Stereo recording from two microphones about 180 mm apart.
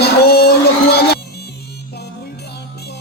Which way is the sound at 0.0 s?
60° left (ahead or behind).